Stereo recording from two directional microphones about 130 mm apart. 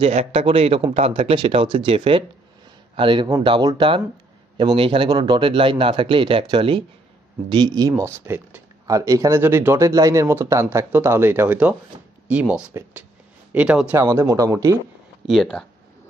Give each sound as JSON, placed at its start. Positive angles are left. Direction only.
{"t": 0.0, "sound": "a man's voice", "side_deg": -50}
{"t": 7.9, "sound": "speech", "side_deg": -20}
{"t": 13.9, "sound": "speech", "side_deg": -25}
{"t": 15.2, "sound": "speech", "side_deg": 5}